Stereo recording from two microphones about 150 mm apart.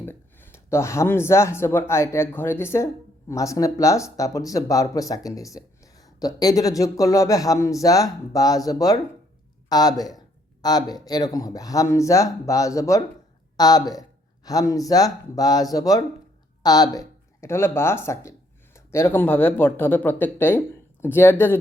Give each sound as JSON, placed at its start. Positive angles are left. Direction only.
{"t": 0.0, "sound": "speech", "side_deg": 15}